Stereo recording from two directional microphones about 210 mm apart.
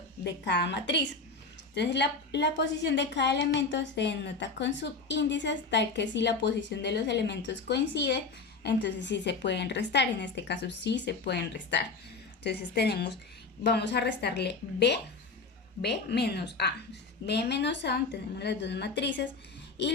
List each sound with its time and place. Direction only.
0.3 s a woman's voice: 55° left (ahead or behind)